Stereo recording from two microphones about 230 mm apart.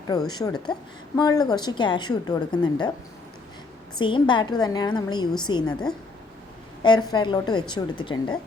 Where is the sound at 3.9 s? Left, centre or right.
Left.